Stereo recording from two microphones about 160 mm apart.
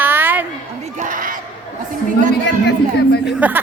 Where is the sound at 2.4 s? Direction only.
90° left.